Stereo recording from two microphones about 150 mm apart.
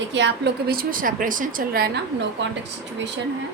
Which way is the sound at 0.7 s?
75° right (ahead or behind).